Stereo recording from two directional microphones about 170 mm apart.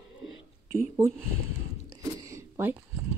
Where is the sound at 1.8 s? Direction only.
15° right (ahead or behind).